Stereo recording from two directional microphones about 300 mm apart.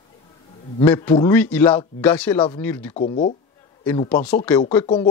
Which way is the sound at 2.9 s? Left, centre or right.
Centre.